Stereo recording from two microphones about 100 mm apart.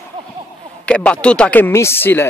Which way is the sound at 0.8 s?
10° left (ahead or behind).